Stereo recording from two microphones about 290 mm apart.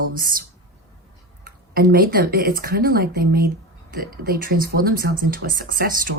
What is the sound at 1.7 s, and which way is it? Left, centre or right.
Speech, right.